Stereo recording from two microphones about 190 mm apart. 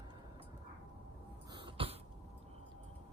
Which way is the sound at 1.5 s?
25° right (ahead or behind).